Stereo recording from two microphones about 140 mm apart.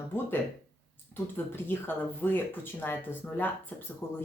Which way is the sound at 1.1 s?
15° left (ahead or behind).